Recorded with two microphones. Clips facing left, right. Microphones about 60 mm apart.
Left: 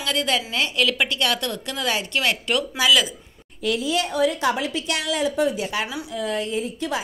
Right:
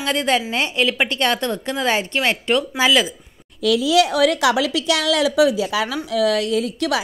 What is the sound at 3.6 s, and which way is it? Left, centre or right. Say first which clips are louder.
A woman's voice: right 7 dB; right.